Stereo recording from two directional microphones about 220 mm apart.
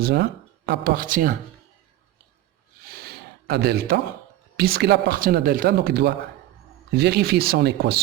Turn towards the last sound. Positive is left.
turn(degrees=-45)  # may be behind; listen again after turning